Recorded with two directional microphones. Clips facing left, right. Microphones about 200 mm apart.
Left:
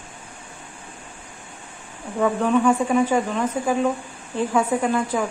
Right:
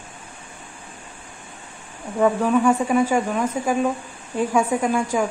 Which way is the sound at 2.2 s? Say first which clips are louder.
Right 1 dB; 5° right (ahead or behind).